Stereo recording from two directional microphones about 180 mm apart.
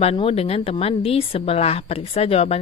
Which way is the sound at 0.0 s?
35° left (ahead or behind).